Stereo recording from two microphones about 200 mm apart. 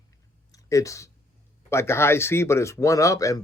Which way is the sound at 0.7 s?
15° left (ahead or behind).